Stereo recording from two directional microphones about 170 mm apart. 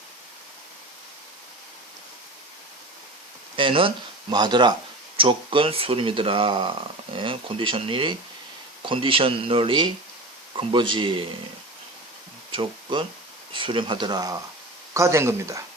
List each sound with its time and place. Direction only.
3.5 s speech: 30° right (ahead or behind)
12.5 s speech: 30° right (ahead or behind)